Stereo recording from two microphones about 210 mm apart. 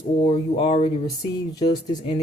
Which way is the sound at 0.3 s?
25° left (ahead or behind).